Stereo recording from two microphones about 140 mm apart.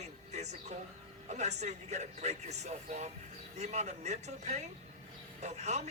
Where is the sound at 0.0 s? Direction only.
55° right (ahead or behind).